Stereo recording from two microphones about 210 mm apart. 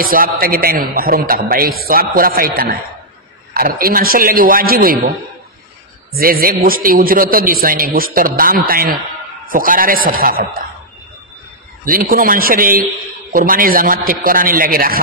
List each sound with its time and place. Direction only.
0.0 s a man's voice: 45° right (ahead or behind)
6.1 s a man's voice: 45° right (ahead or behind)
11.8 s a man's voice: 40° right (ahead or behind)